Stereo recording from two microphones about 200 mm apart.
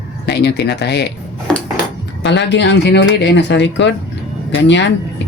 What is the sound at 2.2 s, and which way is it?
Speech, 60° left (ahead or behind).